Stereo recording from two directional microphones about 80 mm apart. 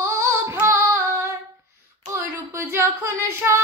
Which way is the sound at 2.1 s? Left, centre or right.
Right.